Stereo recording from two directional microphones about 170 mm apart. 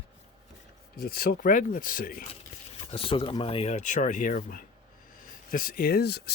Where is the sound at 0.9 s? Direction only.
60° left (ahead or behind).